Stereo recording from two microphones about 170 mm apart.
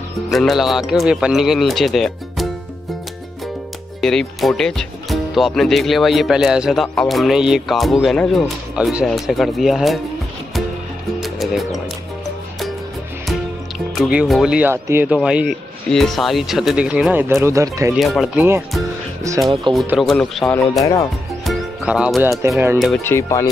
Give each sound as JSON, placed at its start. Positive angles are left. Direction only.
{"t": 0.3, "sound": "speech", "side_deg": 0}
{"t": 4.0, "sound": "speech", "side_deg": 5}
{"t": 11.1, "sound": "music", "side_deg": 0}
{"t": 13.9, "sound": "speech", "side_deg": 0}
{"t": 17.9, "sound": "speech", "side_deg": 0}
{"t": 19.3, "sound": "music", "side_deg": -15}
{"t": 19.7, "sound": "speech", "side_deg": -30}
{"t": 20.0, "sound": "speech", "side_deg": 0}
{"t": 20.8, "sound": "speech", "side_deg": 20}
{"t": 21.5, "sound": "music", "side_deg": -5}
{"t": 23.0, "sound": "speech", "side_deg": 15}